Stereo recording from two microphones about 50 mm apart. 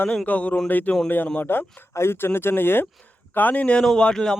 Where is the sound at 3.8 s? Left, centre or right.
Centre.